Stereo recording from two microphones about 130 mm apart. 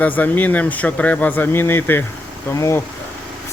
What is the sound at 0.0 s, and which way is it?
Speech, 15° left (ahead or behind).